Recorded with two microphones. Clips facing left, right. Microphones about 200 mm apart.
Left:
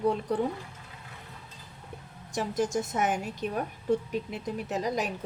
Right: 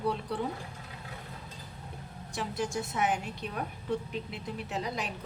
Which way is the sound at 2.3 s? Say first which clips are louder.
Left 5 dB; 45° left (ahead or behind).